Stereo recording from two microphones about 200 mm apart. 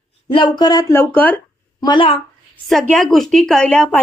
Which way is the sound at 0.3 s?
25° left (ahead or behind).